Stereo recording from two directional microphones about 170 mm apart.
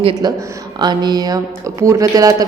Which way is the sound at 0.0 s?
25° right (ahead or behind).